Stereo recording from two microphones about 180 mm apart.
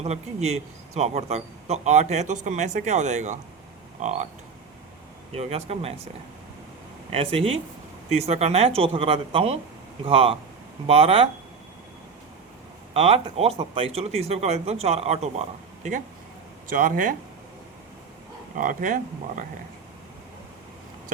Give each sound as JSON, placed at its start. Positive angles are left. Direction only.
{"t": 0.0, "sound": "speech", "side_deg": -40}
{"t": 5.3, "sound": "speech", "side_deg": -35}
{"t": 7.1, "sound": "speech", "side_deg": -30}
{"t": 12.9, "sound": "speech", "side_deg": -35}
{"t": 16.6, "sound": "speech", "side_deg": -50}
{"t": 18.5, "sound": "speech", "side_deg": -50}